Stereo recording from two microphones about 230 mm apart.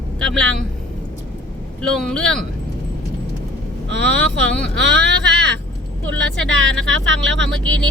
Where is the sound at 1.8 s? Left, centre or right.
Centre.